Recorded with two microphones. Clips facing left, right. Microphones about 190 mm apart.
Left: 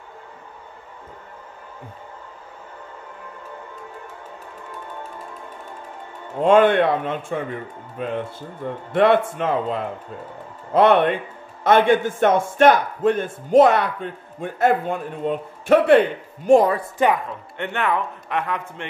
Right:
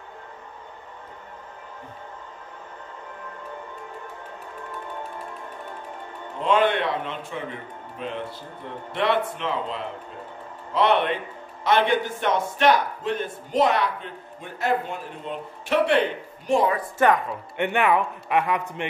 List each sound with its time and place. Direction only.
6.4 s a man's voice: 50° left (ahead or behind)
17.3 s speech: 15° right (ahead or behind)